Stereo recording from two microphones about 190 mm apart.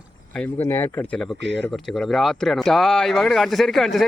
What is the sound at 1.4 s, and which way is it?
Speech, 65° right (ahead or behind).